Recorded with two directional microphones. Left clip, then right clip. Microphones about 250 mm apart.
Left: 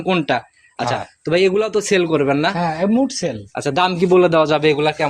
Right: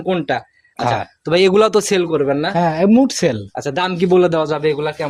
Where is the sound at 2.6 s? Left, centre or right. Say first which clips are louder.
Right 4 dB; right.